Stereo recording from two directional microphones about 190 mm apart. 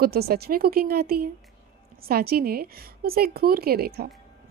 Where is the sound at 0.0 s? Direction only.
55° right (ahead or behind).